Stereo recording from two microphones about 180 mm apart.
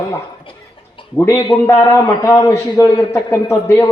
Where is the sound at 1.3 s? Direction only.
15° left (ahead or behind).